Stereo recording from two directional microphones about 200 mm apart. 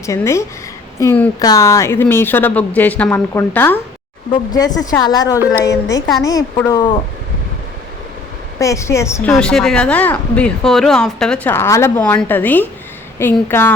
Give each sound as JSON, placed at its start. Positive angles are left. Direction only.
{"t": 0.0, "sound": "speech", "side_deg": 15}
{"t": 8.5, "sound": "speech", "side_deg": 15}